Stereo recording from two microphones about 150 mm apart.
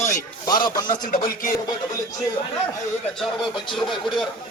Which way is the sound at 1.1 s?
70° left (ahead or behind).